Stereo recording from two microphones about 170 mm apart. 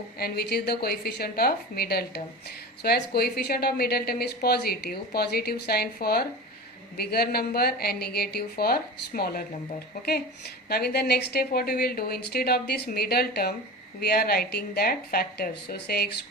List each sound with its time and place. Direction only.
0.2 s a woman's voice: 65° left (ahead or behind)